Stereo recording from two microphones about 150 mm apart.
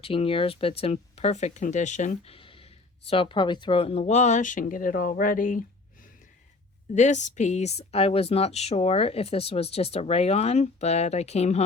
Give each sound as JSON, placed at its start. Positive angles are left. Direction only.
{"t": 0.0, "sound": "speech", "side_deg": 40}
{"t": 6.9, "sound": "speech", "side_deg": 50}